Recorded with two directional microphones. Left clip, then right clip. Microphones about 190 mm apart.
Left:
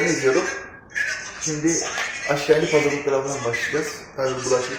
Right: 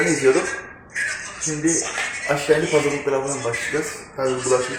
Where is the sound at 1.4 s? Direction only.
Centre (ahead or behind).